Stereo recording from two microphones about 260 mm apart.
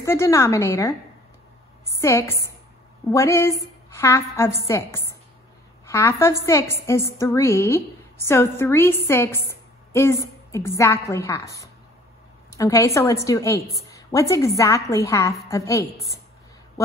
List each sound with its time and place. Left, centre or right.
0.0 s a woman's voice: centre
2.0 s a woman's voice: centre